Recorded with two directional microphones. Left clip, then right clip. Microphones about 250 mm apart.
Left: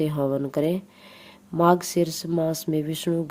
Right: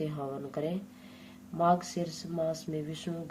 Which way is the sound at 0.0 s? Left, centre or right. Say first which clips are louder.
Left 12 dB; left.